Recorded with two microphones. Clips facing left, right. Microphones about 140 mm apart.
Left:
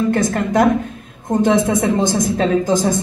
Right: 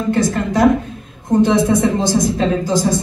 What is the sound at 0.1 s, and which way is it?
A woman's voice, 50° left (ahead or behind).